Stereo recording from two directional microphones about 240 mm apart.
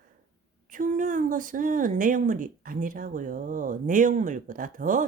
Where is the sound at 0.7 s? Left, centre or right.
Right.